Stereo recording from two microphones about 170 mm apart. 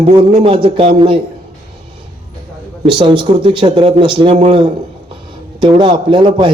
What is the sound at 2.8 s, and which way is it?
A man's voice, 30° right (ahead or behind).